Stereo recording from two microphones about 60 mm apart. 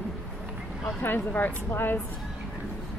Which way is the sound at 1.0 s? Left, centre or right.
Left.